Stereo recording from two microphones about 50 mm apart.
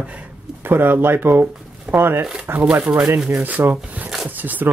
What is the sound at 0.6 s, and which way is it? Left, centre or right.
Speech, right.